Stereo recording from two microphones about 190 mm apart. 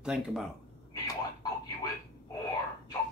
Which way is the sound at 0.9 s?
20° left (ahead or behind).